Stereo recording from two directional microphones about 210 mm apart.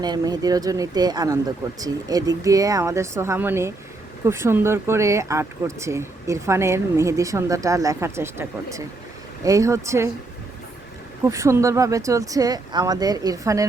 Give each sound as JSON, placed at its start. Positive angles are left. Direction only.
{"t": 0.0, "sound": "speech", "side_deg": -20}
{"t": 11.2, "sound": "speech", "side_deg": -15}